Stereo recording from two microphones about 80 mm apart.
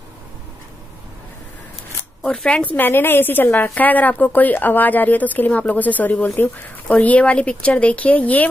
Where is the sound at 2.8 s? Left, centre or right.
Left.